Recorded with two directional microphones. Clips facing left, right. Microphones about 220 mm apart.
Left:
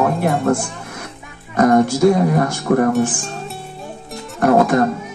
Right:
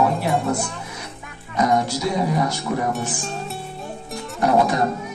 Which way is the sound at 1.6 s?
55° left (ahead or behind).